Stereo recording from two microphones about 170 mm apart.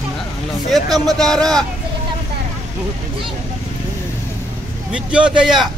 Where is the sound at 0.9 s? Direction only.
Centre (ahead or behind).